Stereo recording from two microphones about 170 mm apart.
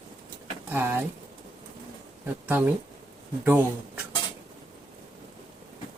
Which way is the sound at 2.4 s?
10° right (ahead or behind).